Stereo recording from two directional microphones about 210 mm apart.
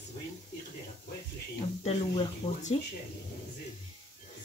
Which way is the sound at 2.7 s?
30° left (ahead or behind).